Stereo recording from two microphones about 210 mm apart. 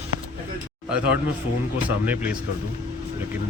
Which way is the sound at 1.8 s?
5° right (ahead or behind).